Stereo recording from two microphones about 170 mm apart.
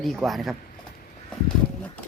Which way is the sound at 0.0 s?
Centre (ahead or behind).